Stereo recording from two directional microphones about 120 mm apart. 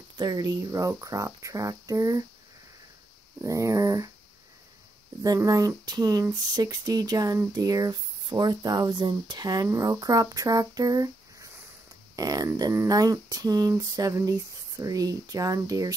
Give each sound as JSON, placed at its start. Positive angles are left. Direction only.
{"t": 0.2, "sound": "speech", "side_deg": -35}
{"t": 3.3, "sound": "speech", "side_deg": -25}
{"t": 5.2, "sound": "speech", "side_deg": -30}